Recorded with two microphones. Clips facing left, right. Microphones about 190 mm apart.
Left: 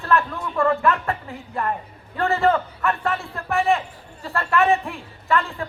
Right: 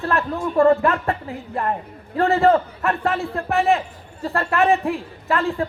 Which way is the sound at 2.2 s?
35° right (ahead or behind).